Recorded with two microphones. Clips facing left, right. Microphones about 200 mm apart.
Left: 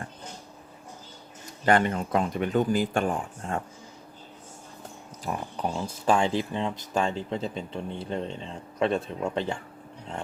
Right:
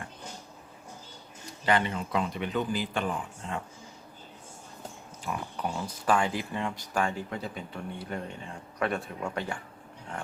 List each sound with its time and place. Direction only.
1.6 s speech: 50° left (ahead or behind)
5.2 s a sound: 35° left (ahead or behind)
5.7 s speech: 25° left (ahead or behind)